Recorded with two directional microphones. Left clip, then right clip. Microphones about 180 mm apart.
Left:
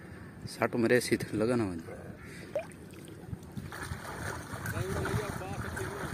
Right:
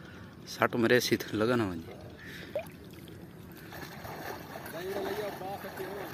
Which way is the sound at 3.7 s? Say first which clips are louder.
Left 2 dB; 25° right (ahead or behind).